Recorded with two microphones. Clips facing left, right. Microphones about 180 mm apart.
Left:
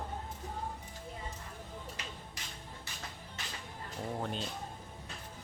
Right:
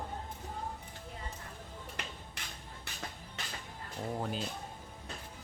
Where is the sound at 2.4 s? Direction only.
60° right (ahead or behind).